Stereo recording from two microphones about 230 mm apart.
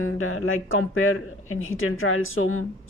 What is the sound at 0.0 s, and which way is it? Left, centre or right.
Speech, left.